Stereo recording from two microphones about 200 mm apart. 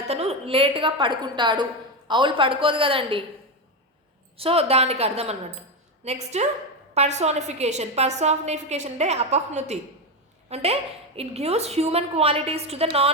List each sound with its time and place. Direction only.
0.1 s a woman's voice: 30° right (ahead or behind)
4.4 s a woman's voice: 30° right (ahead or behind)